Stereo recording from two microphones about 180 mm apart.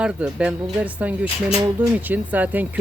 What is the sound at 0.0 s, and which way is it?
Speech, 5° right (ahead or behind).